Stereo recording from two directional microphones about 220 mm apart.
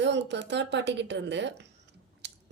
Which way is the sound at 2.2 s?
50° right (ahead or behind).